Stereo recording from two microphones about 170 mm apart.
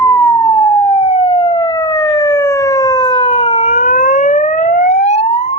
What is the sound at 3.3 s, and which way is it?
Siren, 35° left (ahead or behind).